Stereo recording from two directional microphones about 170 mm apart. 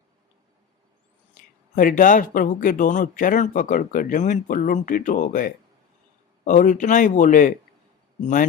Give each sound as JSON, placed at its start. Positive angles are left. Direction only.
{"t": 1.7, "sound": "speech", "side_deg": 50}